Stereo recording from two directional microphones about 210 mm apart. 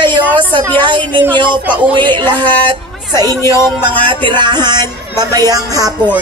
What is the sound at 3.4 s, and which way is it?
Music, 15° left (ahead or behind).